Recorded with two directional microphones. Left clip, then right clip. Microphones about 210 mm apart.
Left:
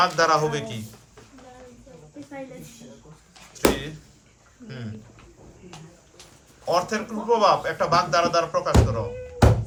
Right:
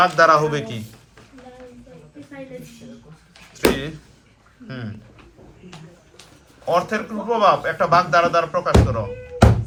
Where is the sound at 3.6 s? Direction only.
5° right (ahead or behind).